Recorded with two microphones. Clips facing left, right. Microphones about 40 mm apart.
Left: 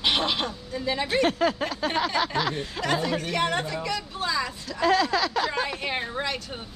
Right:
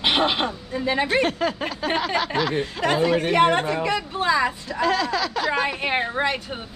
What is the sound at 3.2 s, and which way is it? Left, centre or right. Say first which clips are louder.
A woman's voice: right 8 dB; right.